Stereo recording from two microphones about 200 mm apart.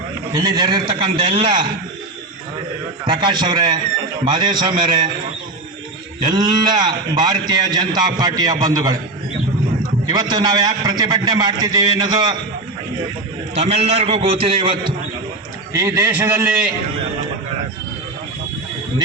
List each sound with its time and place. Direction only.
0.3 s a man's voice: 20° right (ahead or behind)
3.1 s a man's voice: 20° right (ahead or behind)
6.3 s a man's voice: 20° right (ahead or behind)
10.1 s a man's voice: 20° right (ahead or behind)
13.5 s a man's voice: 30° right (ahead or behind)
15.7 s speech: 15° right (ahead or behind)